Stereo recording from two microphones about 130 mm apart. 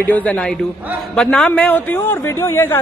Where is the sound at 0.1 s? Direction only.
10° left (ahead or behind).